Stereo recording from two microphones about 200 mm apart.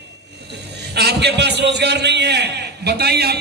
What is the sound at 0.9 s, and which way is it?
A man's voice, 55° right (ahead or behind).